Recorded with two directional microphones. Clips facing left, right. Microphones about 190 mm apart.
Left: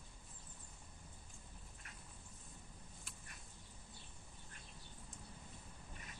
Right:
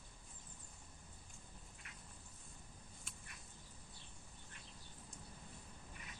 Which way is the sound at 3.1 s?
Centre (ahead or behind).